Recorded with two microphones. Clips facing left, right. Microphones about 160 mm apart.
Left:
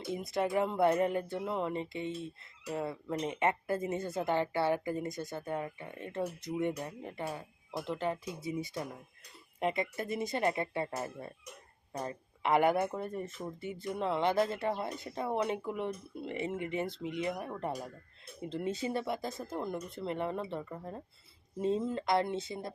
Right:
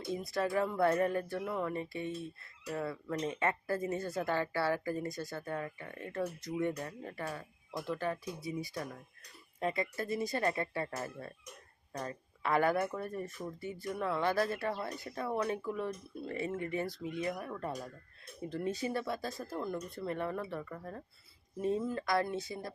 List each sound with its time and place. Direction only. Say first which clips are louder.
0.1 s speech: left 1 dB; 20° left (ahead or behind)